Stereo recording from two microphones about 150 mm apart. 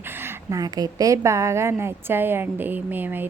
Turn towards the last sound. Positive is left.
turn(degrees=-10)  # may be behind; listen again after turning